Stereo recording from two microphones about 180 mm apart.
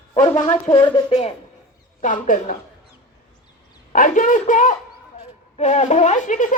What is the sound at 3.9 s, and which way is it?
A woman's voice, 45° left (ahead or behind).